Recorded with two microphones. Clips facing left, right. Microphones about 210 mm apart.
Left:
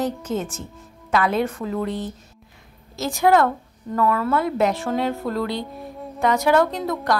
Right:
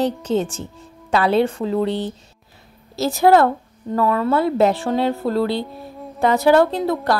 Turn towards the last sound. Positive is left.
turn(degrees=-30)  # may be behind; listen again after turning